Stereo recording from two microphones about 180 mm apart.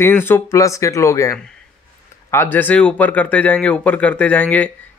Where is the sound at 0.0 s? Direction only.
10° left (ahead or behind).